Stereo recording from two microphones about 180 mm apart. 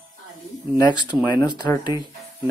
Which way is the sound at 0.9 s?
25° left (ahead or behind).